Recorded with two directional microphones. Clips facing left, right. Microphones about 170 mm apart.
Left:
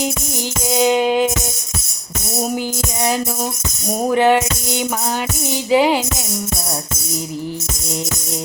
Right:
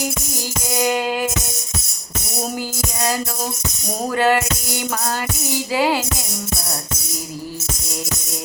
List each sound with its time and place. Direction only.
0.7 s music: 20° left (ahead or behind)
4.1 s music: 20° left (ahead or behind)